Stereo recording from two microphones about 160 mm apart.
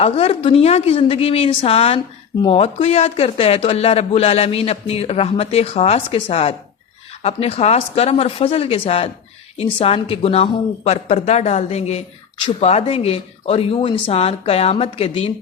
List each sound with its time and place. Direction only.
0.0 s speech: 40° left (ahead or behind)